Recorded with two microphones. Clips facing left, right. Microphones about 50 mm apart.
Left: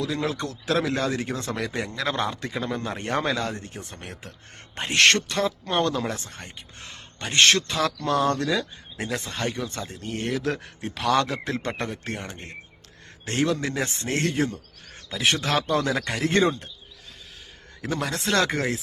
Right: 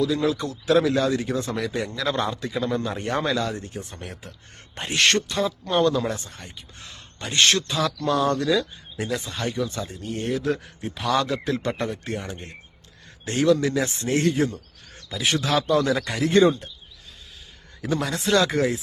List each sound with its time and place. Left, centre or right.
0.0 s speech: left
3.0 s speech: left
11.4 s speech: left
13.2 s speech: left
17.8 s speech: left